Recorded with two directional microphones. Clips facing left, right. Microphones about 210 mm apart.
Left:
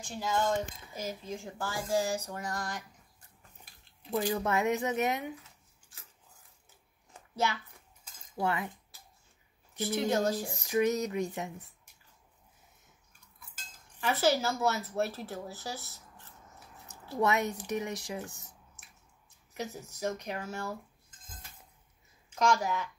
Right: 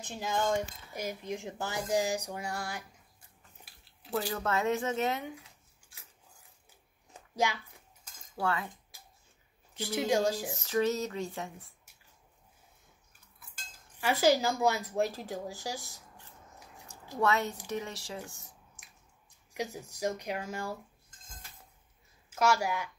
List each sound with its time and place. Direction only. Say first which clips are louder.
0.2 s speech: even; 15° right (ahead or behind)
4.3 s speech: left 1 dB; 15° left (ahead or behind)
5.3 s a sound: left 2 dB; 10° right (ahead or behind)
8.4 s speech: left 1 dB; 20° left (ahead or behind)
9.8 s speech: even; 10° right (ahead or behind)
10.5 s speech: left 1 dB; 15° left (ahead or behind)
13.9 s speech: right 2 dB; 10° right (ahead or behind)
17.2 s speech: left 1 dB; 15° left (ahead or behind)
19.5 s speech: right 2 dB; 15° right (ahead or behind)
22.3 s speech: even; 5° right (ahead or behind)